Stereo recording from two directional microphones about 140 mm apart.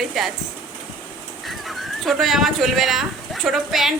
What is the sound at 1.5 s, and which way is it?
Speech, centre (ahead or behind).